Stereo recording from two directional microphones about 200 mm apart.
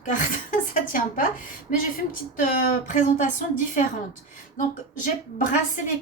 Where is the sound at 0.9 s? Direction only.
45° left (ahead or behind).